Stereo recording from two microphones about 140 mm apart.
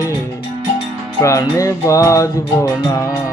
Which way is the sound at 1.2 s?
25° left (ahead or behind).